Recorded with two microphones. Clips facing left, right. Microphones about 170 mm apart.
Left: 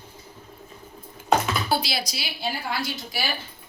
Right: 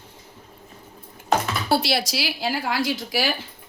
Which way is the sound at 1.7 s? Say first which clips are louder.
Right 9 dB; 70° right (ahead or behind).